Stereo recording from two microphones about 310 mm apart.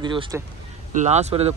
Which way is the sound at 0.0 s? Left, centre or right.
Centre.